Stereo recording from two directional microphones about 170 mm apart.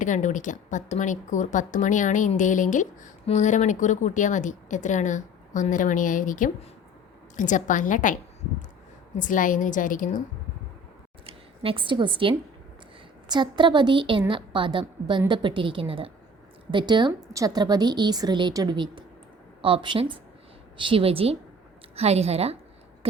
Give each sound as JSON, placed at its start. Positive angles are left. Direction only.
{"t": 0.0, "sound": "a woman's voice", "side_deg": 45}
{"t": 11.3, "sound": "a woman's voice", "side_deg": -30}